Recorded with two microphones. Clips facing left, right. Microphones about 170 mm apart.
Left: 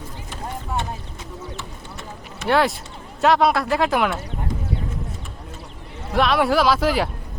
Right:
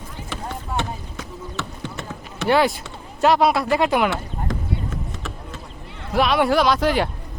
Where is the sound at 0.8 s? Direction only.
85° right.